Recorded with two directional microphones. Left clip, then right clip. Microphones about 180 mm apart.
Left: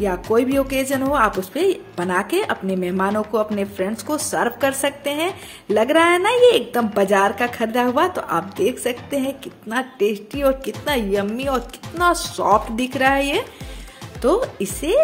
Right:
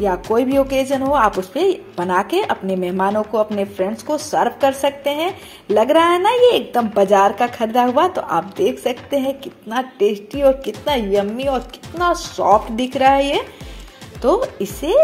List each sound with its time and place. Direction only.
0.0 s speech: 15° left (ahead or behind)